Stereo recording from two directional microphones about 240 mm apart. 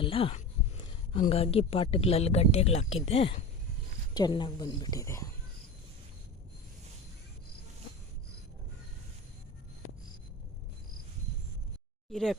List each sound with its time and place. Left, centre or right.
0.0 s a sound: left
1.1 s a woman's voice: left
12.1 s speech: centre